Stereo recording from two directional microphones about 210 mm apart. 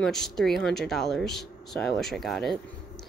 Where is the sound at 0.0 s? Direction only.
Centre (ahead or behind).